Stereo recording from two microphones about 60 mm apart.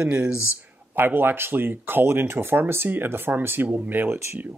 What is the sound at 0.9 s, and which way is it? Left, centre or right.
Speech, right.